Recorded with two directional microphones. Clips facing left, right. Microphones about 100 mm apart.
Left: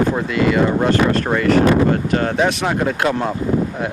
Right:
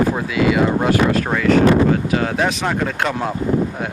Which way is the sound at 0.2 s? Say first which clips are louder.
Even; centre (ahead or behind).